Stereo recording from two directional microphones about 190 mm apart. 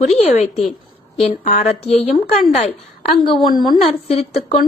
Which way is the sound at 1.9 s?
35° left (ahead or behind).